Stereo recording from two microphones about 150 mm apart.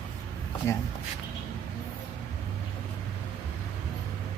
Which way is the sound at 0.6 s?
15° left (ahead or behind).